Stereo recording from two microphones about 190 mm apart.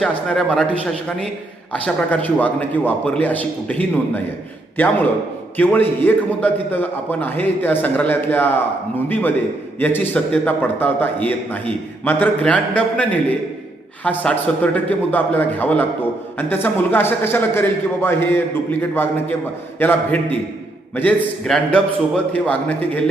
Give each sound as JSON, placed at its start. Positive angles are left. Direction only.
{"t": 0.0, "sound": "a man's voice", "side_deg": 0}